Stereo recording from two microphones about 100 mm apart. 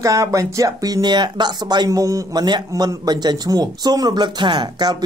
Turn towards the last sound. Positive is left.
turn(degrees=-45)  # may be behind; listen again after turning